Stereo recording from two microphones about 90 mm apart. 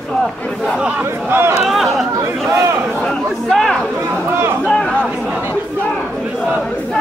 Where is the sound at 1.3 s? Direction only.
25° right (ahead or behind).